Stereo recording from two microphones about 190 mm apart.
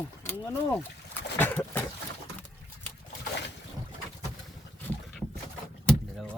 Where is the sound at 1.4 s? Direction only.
10° left (ahead or behind).